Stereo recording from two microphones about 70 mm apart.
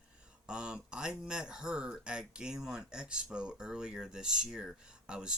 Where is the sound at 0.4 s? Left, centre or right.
Centre.